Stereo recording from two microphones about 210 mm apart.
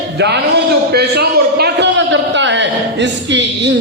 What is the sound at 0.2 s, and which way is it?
A man's voice, 55° right (ahead or behind).